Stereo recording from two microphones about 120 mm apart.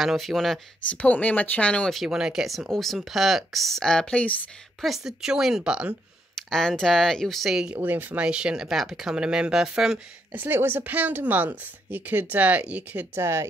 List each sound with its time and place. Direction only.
0.0 s speech: centre (ahead or behind)
0.8 s speech: 15° left (ahead or behind)
2.0 s speech: 5° right (ahead or behind); by 4.5 s 10° left (ahead or behind)
4.8 s speech: 5° right (ahead or behind)
6.3 s speech: 5° left (ahead or behind)
10.3 s speech: 15° right (ahead or behind)